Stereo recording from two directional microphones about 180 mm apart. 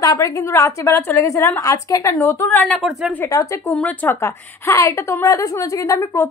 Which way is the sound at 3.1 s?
15° left (ahead or behind).